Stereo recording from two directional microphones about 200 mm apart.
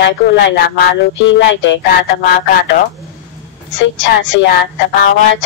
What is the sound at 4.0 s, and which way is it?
Speech, 65° left (ahead or behind).